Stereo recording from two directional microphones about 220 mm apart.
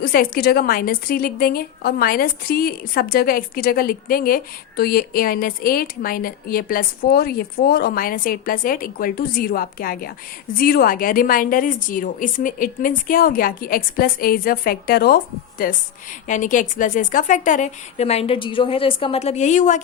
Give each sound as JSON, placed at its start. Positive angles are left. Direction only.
{"t": 0.0, "sound": "a woman's voice", "side_deg": 40}